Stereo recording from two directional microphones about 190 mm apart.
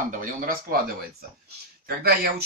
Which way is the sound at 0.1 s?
45° right (ahead or behind).